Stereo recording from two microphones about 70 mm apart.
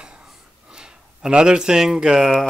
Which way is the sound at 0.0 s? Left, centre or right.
Centre.